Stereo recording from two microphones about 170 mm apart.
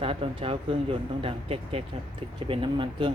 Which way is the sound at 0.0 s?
35° right (ahead or behind).